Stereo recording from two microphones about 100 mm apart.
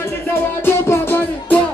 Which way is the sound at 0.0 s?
25° left (ahead or behind).